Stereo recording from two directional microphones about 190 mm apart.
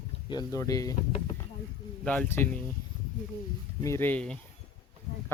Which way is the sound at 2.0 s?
10° left (ahead or behind).